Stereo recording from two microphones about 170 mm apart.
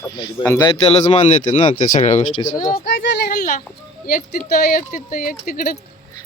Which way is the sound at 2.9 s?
75° left (ahead or behind).